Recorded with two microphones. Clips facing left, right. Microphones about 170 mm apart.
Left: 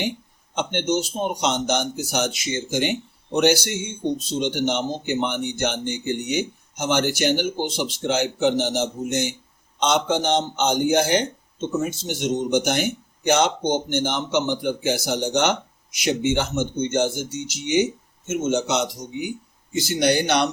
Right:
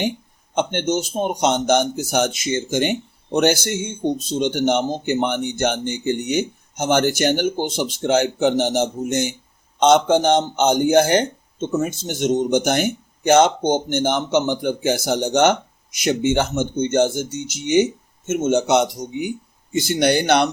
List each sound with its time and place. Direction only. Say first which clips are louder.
0.5 s speech: right 2 dB; 50° right (ahead or behind)